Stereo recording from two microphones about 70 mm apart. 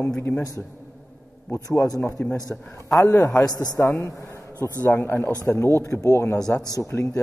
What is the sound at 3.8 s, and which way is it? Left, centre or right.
Speech, left.